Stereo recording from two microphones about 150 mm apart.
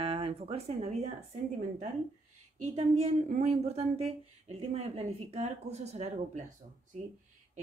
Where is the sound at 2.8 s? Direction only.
45° right (ahead or behind).